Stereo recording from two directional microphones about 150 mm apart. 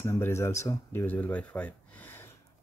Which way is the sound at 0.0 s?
15° left (ahead or behind).